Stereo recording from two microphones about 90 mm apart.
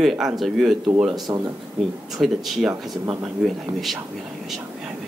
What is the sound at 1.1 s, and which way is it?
Speech, 50° right (ahead or behind).